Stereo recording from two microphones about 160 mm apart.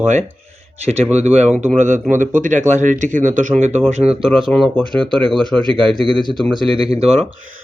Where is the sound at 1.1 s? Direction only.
45° right (ahead or behind).